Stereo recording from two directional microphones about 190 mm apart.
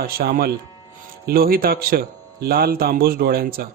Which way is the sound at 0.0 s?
50° right (ahead or behind).